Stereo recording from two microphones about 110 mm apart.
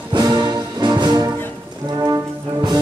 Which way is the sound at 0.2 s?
35° right (ahead or behind).